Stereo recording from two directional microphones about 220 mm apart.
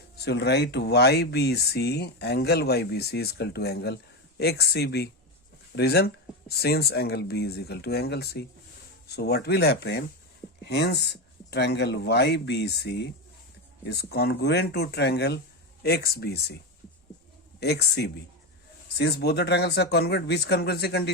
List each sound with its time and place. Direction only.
0.3 s speech: 50° left (ahead or behind)
17.6 s speech: 50° left (ahead or behind)